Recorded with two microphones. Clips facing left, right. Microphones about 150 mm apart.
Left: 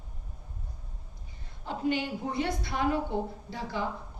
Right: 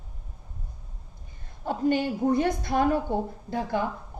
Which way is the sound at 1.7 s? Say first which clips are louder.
Right 5 dB; 45° right (ahead or behind).